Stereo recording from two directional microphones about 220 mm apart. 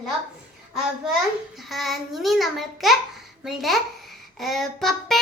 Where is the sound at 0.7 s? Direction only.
Centre (ahead or behind).